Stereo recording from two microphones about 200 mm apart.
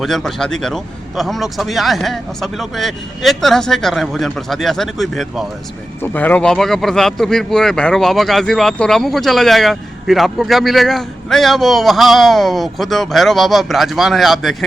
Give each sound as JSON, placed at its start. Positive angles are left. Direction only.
{"t": 0.0, "sound": "speech", "side_deg": 0}